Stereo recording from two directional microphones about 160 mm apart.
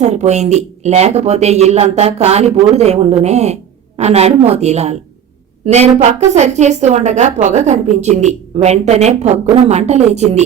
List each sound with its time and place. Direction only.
0.0 s a woman's voice: 45° right (ahead or behind)